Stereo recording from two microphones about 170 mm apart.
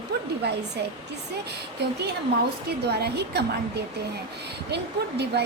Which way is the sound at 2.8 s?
75° right (ahead or behind).